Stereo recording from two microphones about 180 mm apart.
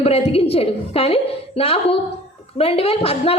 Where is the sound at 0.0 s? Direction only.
35° left (ahead or behind).